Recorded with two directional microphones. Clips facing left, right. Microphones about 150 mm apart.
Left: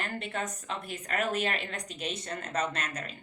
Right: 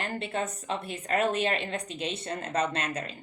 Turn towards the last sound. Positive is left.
turn(degrees=-30)  # may be behind; listen again after turning